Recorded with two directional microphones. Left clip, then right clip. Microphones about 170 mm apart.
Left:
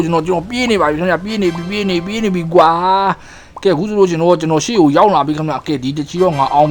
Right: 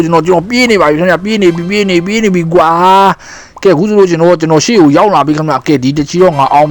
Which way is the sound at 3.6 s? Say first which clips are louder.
Right 6 dB; 25° right (ahead or behind).